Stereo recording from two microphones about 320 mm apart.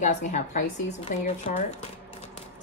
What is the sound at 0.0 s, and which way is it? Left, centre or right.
Speech, left.